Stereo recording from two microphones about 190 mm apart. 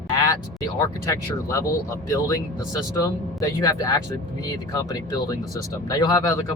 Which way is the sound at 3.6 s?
20° left (ahead or behind).